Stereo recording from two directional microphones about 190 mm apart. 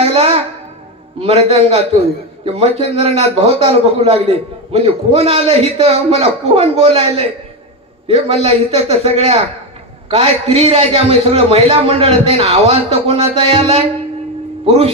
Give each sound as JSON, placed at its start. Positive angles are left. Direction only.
{"t": 0.0, "sound": "music", "side_deg": -30}
{"t": 1.2, "sound": "a man's voice", "side_deg": -30}